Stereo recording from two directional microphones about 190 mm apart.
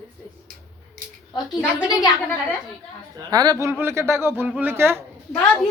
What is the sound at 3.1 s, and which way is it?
Speech, 20° right (ahead or behind).